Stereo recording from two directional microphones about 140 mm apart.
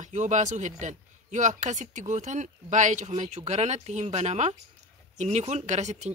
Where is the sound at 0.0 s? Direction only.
60° right (ahead or behind).